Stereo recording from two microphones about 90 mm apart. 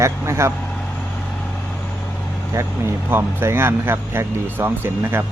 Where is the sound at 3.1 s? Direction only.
25° right (ahead or behind).